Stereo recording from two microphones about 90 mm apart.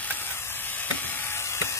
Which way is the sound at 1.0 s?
25° left (ahead or behind).